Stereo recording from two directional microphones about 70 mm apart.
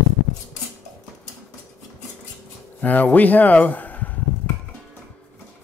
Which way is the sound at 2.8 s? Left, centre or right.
Left.